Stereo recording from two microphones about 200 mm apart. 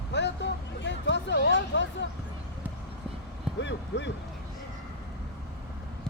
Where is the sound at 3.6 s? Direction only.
60° left (ahead or behind).